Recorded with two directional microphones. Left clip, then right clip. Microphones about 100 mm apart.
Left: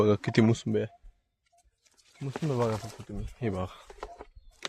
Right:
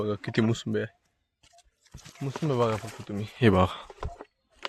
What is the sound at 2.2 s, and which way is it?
Speech, 40° right (ahead or behind).